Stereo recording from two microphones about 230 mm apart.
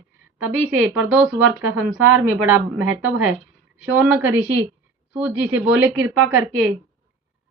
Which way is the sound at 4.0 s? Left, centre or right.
Centre.